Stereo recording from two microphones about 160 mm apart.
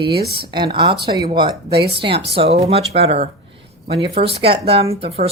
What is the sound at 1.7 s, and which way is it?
Speech, 80° right.